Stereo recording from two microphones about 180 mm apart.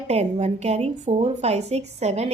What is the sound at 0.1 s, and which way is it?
A woman's voice, 35° right (ahead or behind).